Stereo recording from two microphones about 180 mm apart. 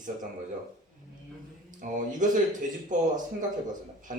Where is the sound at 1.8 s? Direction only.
45° right (ahead or behind).